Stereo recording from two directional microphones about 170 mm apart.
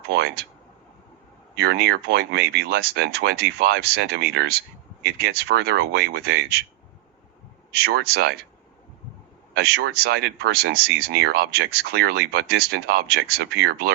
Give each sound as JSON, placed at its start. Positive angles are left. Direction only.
{"t": 0.1, "sound": "speech", "side_deg": -70}
{"t": 1.6, "sound": "speech", "side_deg": -70}
{"t": 7.7, "sound": "speech", "side_deg": -70}
{"t": 9.6, "sound": "speech", "side_deg": -70}